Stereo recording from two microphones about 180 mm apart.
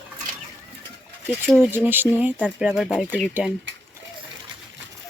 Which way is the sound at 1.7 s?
10° right (ahead or behind).